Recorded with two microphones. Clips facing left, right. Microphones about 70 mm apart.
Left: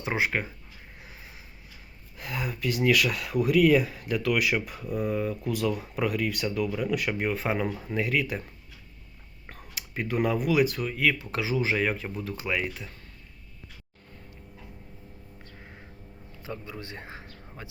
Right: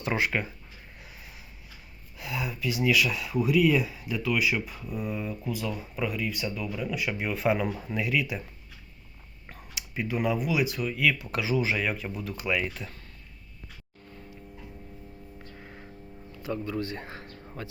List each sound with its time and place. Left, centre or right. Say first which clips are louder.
0.0 s speech: even; left
0.9 s a sound: left 2 dB; left
2.1 s speech: even; left
5.5 s speech: left 4 dB; left
6.9 s speech: left 3 dB; left
9.5 s speech: left 1 dB; left
11.1 s speech: right 1 dB; left
16.4 s a man's voice: right 7 dB; centre